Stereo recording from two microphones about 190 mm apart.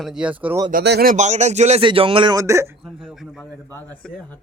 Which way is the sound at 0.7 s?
60° right (ahead or behind).